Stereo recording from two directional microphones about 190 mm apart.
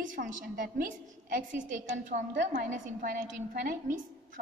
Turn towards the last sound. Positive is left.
turn(degrees=-45)  # may be behind; listen again after turning